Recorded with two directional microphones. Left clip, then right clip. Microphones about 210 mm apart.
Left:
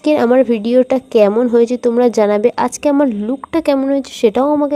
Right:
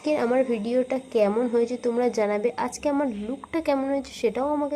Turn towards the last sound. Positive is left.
turn(degrees=35)  # may be behind; listen again after turning